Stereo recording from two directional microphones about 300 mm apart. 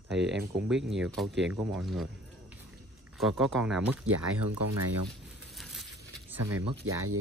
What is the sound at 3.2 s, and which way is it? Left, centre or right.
Speech, centre.